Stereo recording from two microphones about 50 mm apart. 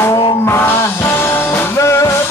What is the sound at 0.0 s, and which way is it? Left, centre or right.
Music, left.